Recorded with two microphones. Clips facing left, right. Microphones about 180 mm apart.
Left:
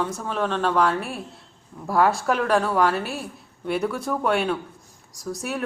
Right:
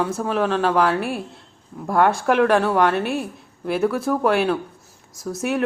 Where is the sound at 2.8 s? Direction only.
60° right (ahead or behind).